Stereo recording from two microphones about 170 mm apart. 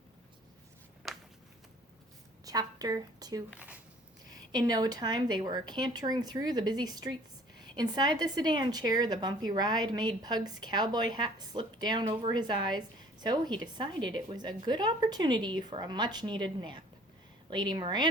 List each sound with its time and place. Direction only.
1.0 s a sound: centre (ahead or behind)
2.4 s a woman's voice: 20° right (ahead or behind)
3.5 s speech: 5° right (ahead or behind)
4.3 s a woman's voice: 25° right (ahead or behind)